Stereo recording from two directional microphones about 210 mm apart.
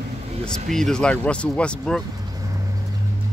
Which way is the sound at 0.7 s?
Centre (ahead or behind).